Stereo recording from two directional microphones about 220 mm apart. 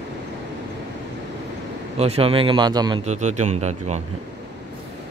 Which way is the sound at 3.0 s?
30° right (ahead or behind).